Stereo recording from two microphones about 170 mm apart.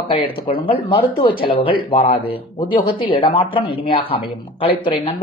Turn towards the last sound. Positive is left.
turn(degrees=30)  # may be behind; listen again after turning